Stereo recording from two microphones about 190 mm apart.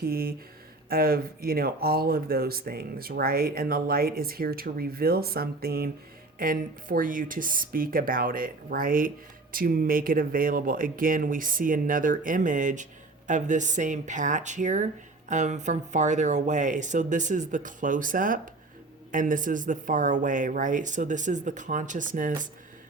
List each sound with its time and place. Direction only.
0.0 s speech: 50° right (ahead or behind)